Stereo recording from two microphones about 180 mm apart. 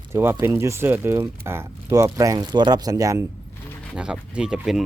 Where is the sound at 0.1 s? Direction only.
15° right (ahead or behind).